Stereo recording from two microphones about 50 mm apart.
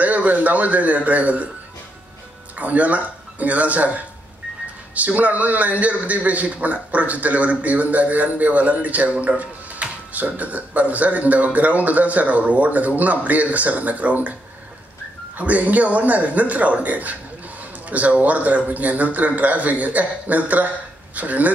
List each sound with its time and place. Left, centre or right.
0.0 s speech: right
2.5 s speech: right
15.3 s speech: right